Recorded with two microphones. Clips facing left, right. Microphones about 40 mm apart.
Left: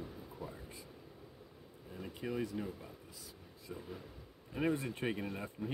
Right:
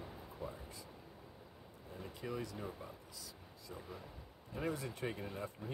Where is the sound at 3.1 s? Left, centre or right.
Left.